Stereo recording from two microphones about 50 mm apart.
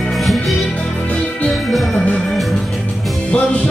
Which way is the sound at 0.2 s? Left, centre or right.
Centre.